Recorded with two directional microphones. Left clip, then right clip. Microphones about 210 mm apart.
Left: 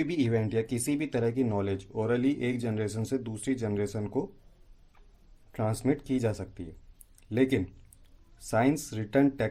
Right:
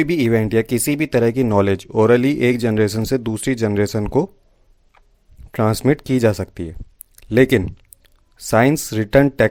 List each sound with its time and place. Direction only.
0.0 s speech: 45° right (ahead or behind)
5.5 s speech: 45° right (ahead or behind)